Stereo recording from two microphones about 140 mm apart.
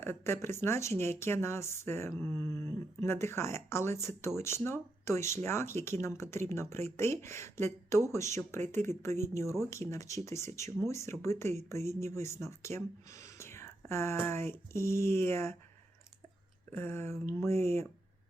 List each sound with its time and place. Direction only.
0.0 s speech: 15° left (ahead or behind)
16.7 s speech: 15° left (ahead or behind)